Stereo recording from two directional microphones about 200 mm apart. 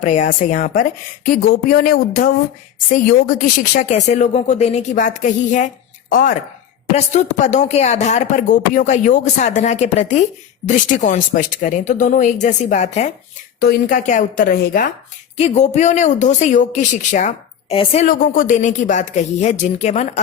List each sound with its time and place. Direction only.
0.0 s a woman's voice: 40° left (ahead or behind)
3.8 s speech: 35° left (ahead or behind)
13.6 s a woman's voice: 45° left (ahead or behind)
15.4 s speech: 35° left (ahead or behind)